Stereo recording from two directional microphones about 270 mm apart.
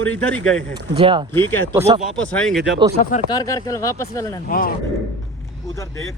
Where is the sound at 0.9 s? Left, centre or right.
Centre.